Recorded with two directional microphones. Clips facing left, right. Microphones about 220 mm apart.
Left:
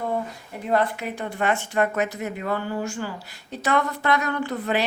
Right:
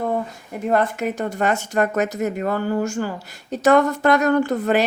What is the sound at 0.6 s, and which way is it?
Speech, 45° right (ahead or behind).